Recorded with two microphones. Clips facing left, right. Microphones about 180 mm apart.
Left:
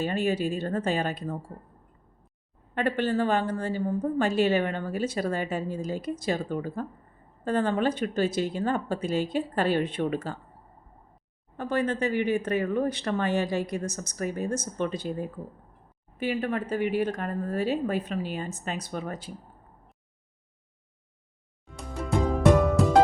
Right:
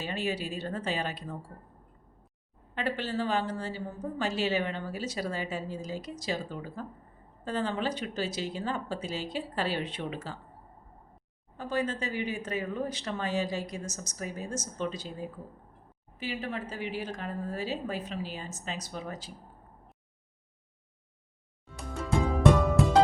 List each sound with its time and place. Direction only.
0.0 s a woman's voice: 50° left (ahead or behind)
2.7 s a woman's voice: 55° left (ahead or behind)
11.5 s speech: 60° left (ahead or behind)
16.1 s speech: 55° left (ahead or behind)